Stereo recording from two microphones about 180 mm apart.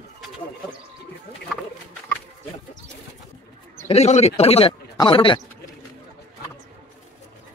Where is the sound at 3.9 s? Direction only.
35° left (ahead or behind).